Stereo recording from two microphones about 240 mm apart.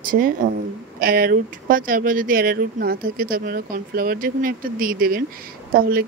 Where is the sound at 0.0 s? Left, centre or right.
Right.